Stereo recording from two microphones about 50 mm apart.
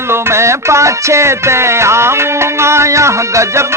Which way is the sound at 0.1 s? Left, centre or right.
Right.